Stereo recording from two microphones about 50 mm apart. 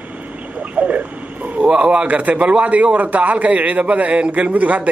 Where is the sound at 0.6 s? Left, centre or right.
Right.